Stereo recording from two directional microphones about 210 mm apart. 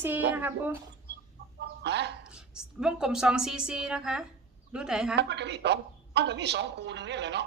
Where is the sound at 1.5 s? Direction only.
55° right (ahead or behind).